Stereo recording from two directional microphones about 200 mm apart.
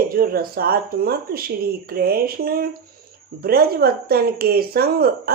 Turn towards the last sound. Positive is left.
turn(degrees=-50)  # may be behind; listen again after turning